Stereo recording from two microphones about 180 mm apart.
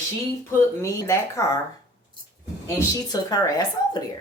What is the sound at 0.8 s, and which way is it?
Speech, 15° left (ahead or behind).